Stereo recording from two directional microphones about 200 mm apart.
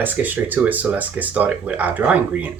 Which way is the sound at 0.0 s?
10° right (ahead or behind).